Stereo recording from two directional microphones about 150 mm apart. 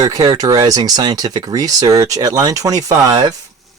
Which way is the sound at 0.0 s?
25° right (ahead or behind).